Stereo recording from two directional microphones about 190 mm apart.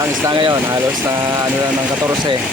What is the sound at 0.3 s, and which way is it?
Speech, 20° right (ahead or behind).